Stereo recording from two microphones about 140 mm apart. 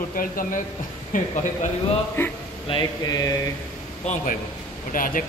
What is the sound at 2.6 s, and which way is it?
Mantra, 35° left (ahead or behind).